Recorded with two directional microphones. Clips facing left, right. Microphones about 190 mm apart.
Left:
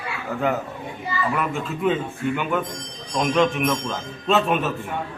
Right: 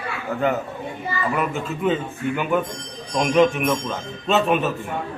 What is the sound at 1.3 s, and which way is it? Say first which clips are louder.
A man's voice: right 1 dB; 5° right (ahead or behind).